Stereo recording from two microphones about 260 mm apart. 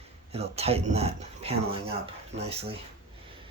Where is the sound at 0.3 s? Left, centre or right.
Right.